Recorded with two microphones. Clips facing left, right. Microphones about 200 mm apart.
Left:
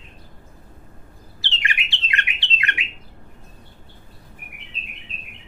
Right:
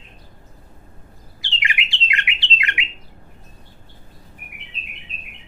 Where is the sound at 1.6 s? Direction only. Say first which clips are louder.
Right 2 dB; 20° right (ahead or behind).